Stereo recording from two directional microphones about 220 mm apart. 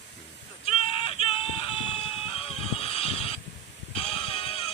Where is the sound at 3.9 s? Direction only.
25° left (ahead or behind).